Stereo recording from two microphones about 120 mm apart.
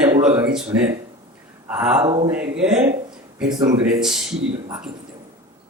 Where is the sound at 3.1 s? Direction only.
5° right (ahead or behind).